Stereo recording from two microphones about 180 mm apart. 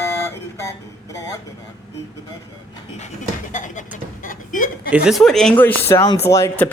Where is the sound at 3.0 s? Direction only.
40° left (ahead or behind).